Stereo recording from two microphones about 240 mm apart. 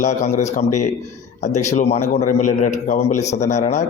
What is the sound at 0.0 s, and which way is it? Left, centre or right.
Speech, left.